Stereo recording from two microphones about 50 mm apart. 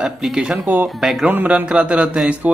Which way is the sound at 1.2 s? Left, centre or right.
Right.